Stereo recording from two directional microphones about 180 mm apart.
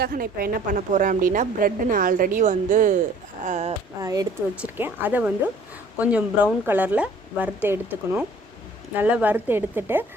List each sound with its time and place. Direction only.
0.0 s a woman's voice: 55° right (ahead or behind); by 3.8 s 40° right (ahead or behind)
4.0 s speech: 20° right (ahead or behind)
4.6 s speech: 10° right (ahead or behind)